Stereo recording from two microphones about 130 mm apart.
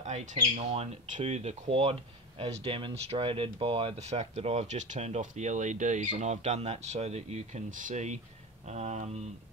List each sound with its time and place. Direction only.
0.0 s speech: 65° right (ahead or behind); by 3.9 s 40° right (ahead or behind)
4.0 s speech: 60° right (ahead or behind)